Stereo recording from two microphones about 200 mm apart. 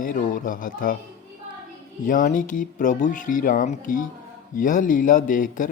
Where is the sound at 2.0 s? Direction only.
40° left (ahead or behind).